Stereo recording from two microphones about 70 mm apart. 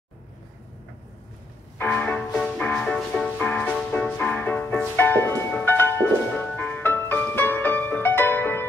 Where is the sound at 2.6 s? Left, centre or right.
Centre.